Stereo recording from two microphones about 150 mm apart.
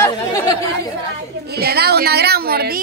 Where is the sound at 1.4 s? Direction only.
90° right.